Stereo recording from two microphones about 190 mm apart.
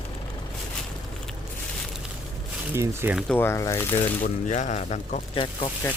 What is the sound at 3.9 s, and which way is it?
Speech, 40° left (ahead or behind).